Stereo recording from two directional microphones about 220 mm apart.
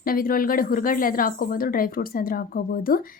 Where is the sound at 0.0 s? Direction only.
40° left (ahead or behind).